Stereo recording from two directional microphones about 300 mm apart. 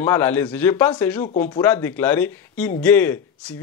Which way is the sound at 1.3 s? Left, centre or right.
Left.